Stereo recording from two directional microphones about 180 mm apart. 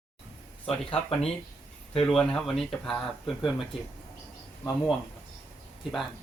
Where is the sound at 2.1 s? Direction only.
Centre (ahead or behind).